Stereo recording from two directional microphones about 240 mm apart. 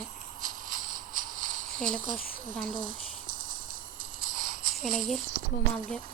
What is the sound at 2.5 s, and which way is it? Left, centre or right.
Speech, right.